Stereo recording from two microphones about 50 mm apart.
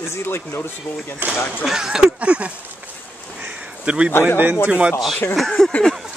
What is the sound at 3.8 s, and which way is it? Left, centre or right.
Speech, right.